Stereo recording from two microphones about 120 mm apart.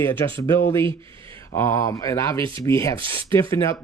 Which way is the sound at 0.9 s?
45° right (ahead or behind).